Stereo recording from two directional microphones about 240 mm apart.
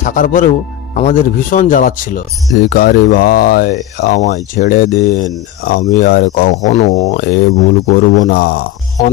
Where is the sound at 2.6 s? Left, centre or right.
Left.